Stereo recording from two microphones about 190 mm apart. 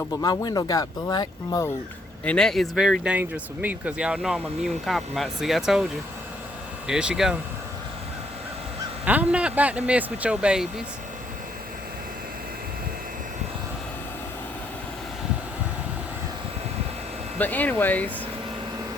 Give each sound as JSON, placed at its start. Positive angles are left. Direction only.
{"t": 0.1, "sound": "speech", "side_deg": 20}
{"t": 2.2, "sound": "speech", "side_deg": 5}
{"t": 6.8, "sound": "speech", "side_deg": -5}
{"t": 9.0, "sound": "speech", "side_deg": -5}
{"t": 17.3, "sound": "speech", "side_deg": 10}